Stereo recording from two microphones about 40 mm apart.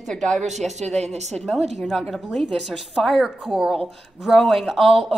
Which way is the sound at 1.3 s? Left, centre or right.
Centre.